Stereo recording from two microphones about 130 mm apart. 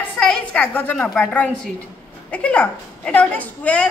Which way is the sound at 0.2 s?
10° left (ahead or behind).